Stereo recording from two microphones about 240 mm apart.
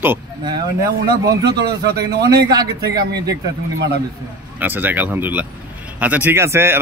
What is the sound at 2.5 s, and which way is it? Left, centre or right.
Speech, centre.